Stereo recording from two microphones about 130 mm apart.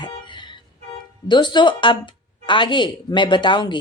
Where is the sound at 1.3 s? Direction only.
35° left (ahead or behind).